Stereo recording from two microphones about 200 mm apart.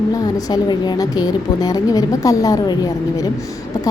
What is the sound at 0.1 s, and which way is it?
A woman's voice, 20° left (ahead or behind).